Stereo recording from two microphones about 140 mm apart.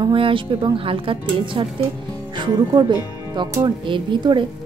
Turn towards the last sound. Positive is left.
turn(degrees=-35)  # may be behind; listen again after turning